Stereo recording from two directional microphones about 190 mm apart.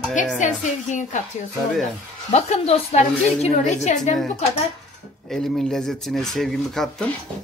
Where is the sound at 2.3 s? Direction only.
35° left (ahead or behind).